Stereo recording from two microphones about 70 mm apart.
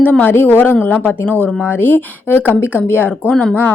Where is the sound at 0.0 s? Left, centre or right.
Left.